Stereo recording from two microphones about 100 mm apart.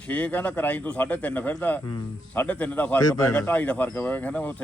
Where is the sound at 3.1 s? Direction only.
40° left (ahead or behind).